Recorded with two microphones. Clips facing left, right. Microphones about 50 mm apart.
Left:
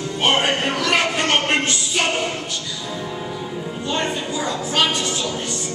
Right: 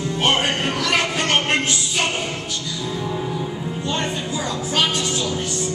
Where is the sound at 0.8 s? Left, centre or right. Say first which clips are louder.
Left 1 dB; centre.